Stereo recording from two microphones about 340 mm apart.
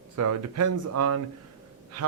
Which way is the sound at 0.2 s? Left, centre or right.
Right.